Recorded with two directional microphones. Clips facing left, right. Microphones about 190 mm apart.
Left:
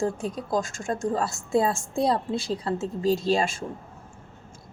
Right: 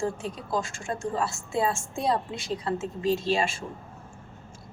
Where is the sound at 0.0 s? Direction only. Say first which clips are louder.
Left 3 dB; 40° left (ahead or behind).